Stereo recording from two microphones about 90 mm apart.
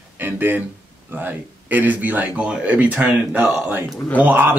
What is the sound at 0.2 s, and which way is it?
A man's voice, 20° right (ahead or behind).